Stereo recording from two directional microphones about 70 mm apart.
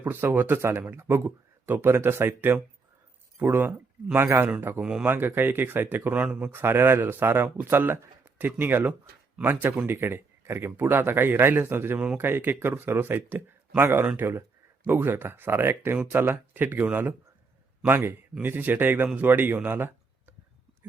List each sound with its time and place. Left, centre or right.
0.0 s speech: right
4.8 s speech: centre
5.0 s speech: right
6.5 s speech: right